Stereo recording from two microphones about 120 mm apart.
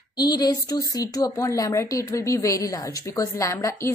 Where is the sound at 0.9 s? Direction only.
30° left (ahead or behind).